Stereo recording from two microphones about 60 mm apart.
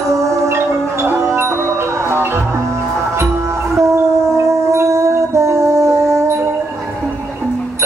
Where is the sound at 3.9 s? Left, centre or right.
Right.